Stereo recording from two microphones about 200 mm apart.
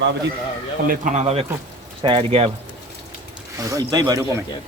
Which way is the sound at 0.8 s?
35° right (ahead or behind).